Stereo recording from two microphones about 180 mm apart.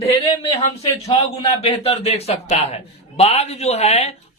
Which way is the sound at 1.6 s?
35° left (ahead or behind).